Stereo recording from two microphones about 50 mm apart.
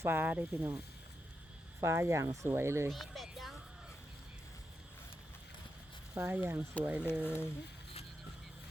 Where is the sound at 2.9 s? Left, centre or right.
Centre.